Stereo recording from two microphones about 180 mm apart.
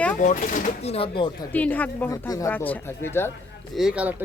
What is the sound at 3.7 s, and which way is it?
Speech, 5° right (ahead or behind).